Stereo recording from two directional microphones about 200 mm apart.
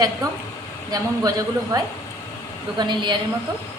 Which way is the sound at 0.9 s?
20° right (ahead or behind).